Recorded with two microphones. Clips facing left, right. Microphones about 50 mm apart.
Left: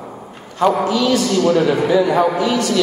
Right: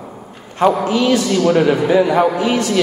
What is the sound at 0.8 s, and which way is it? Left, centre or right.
A man's voice, right.